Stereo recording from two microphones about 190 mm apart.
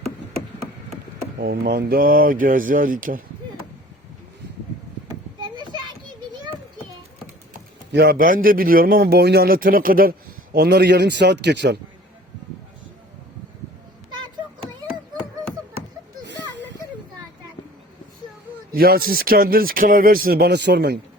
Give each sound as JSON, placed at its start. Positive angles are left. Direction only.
{"t": 1.4, "sound": "a man's voice", "side_deg": -55}
{"t": 7.9, "sound": "a man's voice", "side_deg": -55}
{"t": 18.7, "sound": "a man's voice", "side_deg": -50}